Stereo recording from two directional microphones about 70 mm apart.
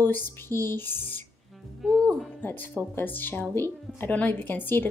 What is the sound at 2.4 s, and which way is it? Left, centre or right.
Speech, left.